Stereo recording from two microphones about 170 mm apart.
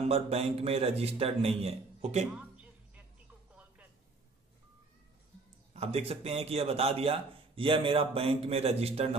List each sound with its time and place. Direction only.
0.0 s a man's voice: 35° right (ahead or behind)
2.3 s a sound: 10° right (ahead or behind)
5.7 s a man's voice: 35° right (ahead or behind)